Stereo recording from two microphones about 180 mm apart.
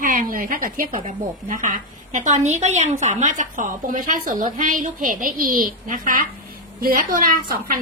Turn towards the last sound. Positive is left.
turn(degrees=-50)  # may be behind; listen again after turning